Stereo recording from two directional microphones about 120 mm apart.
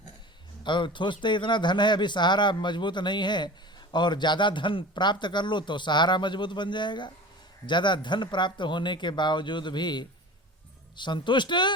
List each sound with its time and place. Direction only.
0.6 s a man's voice: 40° left (ahead or behind)